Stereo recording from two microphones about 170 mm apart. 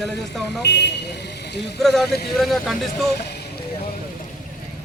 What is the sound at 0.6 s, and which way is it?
Speech, 80° left.